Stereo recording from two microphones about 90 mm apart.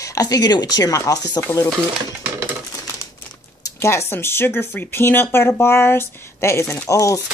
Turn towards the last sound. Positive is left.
turn(degrees=35)  # may be behind; listen again after turning